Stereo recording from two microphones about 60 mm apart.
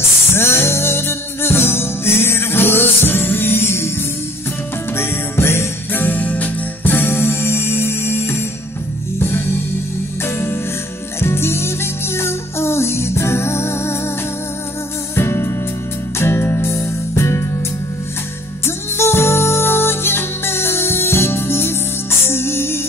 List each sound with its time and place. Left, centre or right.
0.3 s music: left
4.9 s music: left
10.2 s music: left
15.1 s music: left
18.9 s music: left